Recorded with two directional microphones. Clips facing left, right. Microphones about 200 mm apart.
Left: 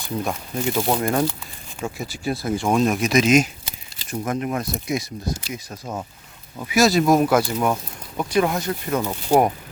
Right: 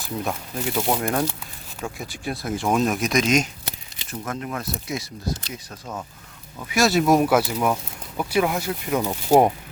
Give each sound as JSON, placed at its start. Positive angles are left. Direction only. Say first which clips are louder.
{"t": 0.0, "sound": "speech", "louder": "left 2 dB", "side_deg": -5}
{"t": 6.7, "sound": "speech", "louder": "left 2 dB", "side_deg": 0}